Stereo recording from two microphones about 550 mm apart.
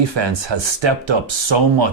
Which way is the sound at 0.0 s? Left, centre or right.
Right.